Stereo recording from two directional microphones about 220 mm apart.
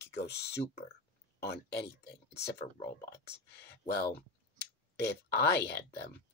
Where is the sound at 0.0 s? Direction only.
50° left (ahead or behind).